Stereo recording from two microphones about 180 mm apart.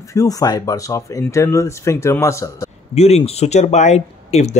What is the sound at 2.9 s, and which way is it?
Speech, 35° left (ahead or behind).